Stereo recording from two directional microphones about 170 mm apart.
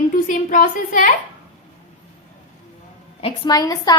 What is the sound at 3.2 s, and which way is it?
Speech, 25° left (ahead or behind).